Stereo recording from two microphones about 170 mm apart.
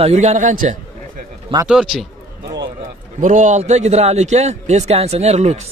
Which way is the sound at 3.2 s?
45° right (ahead or behind).